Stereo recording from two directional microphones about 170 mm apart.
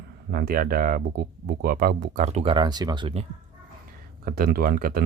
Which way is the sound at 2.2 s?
40° right (ahead or behind).